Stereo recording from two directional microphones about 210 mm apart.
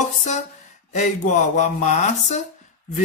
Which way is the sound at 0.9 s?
35° left (ahead or behind).